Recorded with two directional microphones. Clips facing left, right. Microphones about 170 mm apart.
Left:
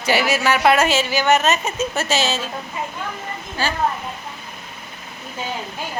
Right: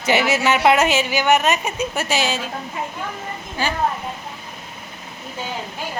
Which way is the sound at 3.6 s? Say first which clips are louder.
Even; 15° right (ahead or behind).